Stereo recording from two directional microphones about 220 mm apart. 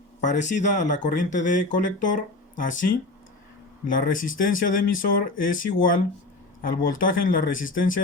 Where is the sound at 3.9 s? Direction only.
40° left (ahead or behind).